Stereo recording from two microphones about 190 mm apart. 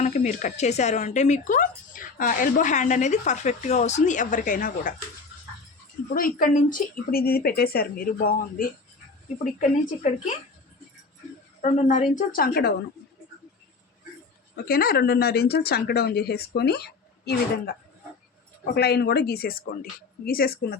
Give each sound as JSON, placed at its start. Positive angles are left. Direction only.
{"t": 0.0, "sound": "speech", "side_deg": 40}
{"t": 6.1, "sound": "speech", "side_deg": 45}
{"t": 11.6, "sound": "speech", "side_deg": 40}
{"t": 14.5, "sound": "speech", "side_deg": 50}